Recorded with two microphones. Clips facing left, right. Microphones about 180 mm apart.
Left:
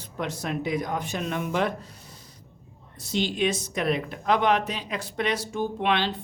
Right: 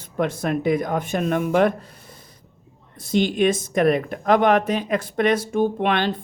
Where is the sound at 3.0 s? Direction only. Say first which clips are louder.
Right 7 dB; 50° right (ahead or behind).